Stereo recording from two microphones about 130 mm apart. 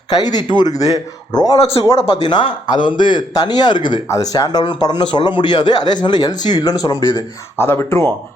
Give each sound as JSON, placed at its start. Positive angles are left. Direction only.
{"t": 0.2, "sound": "speech", "side_deg": 30}
{"t": 7.5, "sound": "speech", "side_deg": 15}